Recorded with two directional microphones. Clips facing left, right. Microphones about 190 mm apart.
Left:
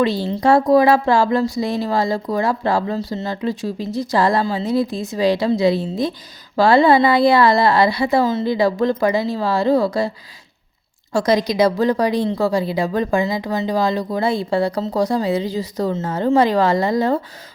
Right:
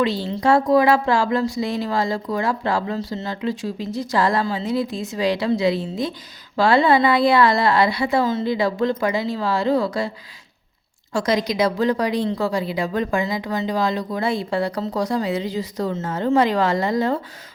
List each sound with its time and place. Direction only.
0.0 s a woman's voice: 40° left (ahead or behind)
11.1 s a woman's voice: 35° left (ahead or behind)